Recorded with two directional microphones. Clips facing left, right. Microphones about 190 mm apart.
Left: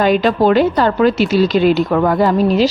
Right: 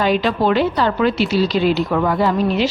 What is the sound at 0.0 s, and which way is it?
A woman's voice, 50° left (ahead or behind).